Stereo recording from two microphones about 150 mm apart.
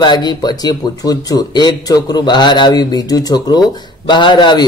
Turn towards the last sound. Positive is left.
turn(degrees=30)  # may be behind; listen again after turning